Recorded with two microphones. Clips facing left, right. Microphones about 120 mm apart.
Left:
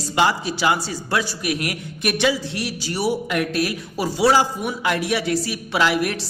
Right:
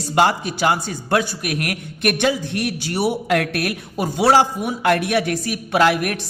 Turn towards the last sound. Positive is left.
turn(degrees=-55)  # may be behind; listen again after turning